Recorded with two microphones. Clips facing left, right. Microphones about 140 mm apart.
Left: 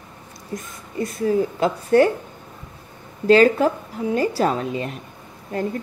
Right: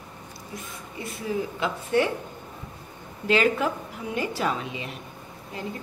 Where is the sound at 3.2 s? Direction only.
40° left (ahead or behind).